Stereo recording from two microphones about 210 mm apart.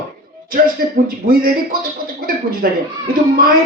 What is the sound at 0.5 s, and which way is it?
Speech, 45° right (ahead or behind).